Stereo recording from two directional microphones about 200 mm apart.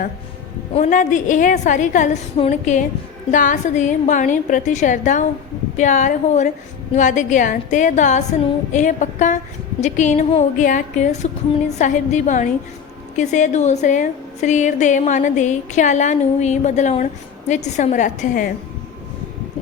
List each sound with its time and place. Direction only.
0.7 s a woman's voice: 35° left (ahead or behind)